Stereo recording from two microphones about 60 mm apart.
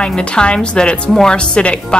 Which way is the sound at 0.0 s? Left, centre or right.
Centre.